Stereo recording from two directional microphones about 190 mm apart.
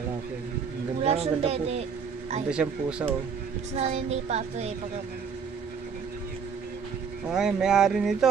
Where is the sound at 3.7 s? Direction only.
35° right (ahead or behind).